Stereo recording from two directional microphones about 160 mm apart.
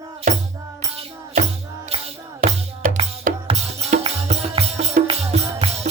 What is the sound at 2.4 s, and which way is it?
Music, 60° right (ahead or behind).